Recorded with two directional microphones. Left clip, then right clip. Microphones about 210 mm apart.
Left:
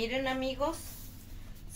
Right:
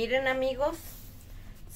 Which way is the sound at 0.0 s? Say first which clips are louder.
Right 5 dB; 40° right (ahead or behind).